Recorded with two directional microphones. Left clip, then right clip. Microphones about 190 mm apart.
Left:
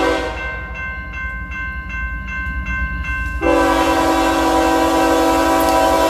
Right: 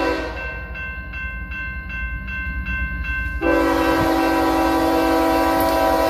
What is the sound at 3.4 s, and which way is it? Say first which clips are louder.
Train: left 4 dB; 5° left (ahead or behind).